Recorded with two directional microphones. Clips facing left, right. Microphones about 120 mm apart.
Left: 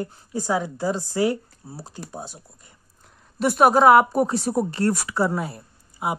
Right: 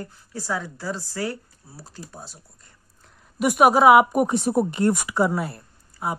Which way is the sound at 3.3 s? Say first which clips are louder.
Even; 10° right (ahead or behind).